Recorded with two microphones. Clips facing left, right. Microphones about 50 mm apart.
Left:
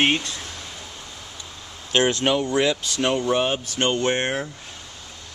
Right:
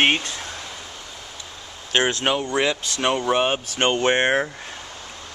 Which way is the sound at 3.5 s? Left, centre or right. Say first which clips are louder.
Right 2 dB; right.